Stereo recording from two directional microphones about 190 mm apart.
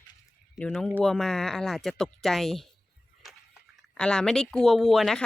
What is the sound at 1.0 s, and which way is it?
Speech, centre (ahead or behind).